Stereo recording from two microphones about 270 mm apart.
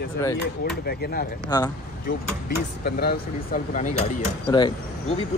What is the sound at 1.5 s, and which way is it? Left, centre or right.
Speech, centre.